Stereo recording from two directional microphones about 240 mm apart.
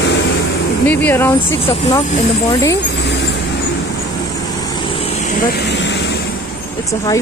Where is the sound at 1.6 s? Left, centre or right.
Left.